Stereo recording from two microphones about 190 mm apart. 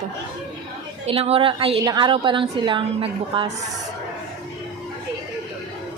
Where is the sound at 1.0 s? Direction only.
30° right (ahead or behind).